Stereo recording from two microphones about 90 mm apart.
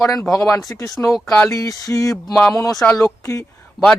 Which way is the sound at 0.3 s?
35° left (ahead or behind).